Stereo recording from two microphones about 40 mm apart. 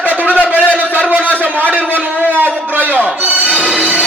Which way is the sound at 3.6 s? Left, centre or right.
Right.